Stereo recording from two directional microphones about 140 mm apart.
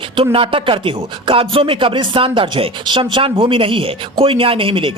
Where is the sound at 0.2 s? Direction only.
40° right (ahead or behind).